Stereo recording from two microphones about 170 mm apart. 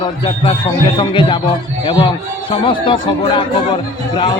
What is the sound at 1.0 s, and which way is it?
A man's voice, 30° left (ahead or behind).